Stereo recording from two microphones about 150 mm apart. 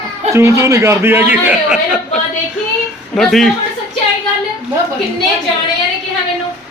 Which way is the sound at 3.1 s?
Centre (ahead or behind).